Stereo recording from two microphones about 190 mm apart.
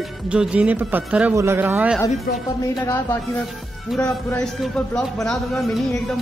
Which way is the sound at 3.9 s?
Centre (ahead or behind).